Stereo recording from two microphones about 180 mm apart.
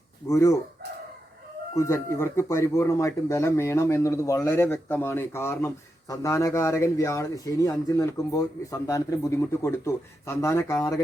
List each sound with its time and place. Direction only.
0.3 s speech: 15° left (ahead or behind)
1.7 s speech: 15° left (ahead or behind)